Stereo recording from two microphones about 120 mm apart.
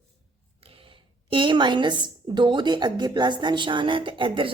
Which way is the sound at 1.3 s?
45° right (ahead or behind).